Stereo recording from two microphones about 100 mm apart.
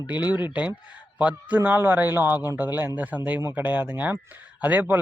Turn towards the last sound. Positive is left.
turn(degrees=-20)  # may be behind; listen again after turning